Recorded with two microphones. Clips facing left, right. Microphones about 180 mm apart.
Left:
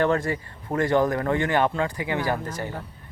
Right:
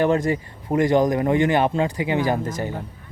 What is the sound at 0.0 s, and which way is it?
Speech, 20° right (ahead or behind).